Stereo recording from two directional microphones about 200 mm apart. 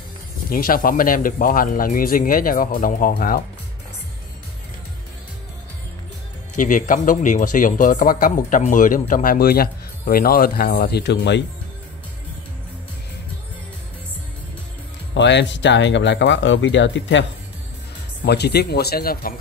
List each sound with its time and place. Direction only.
0.5 s speech: 45° left (ahead or behind)
6.5 s speech: 40° left (ahead or behind); by 11.4 s 60° left (ahead or behind)
15.1 s speech: 60° left (ahead or behind)
18.2 s speech: 55° left (ahead or behind)